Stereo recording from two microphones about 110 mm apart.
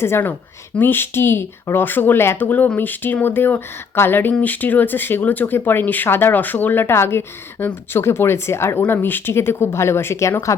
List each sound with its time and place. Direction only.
0.0 s speech: 20° left (ahead or behind)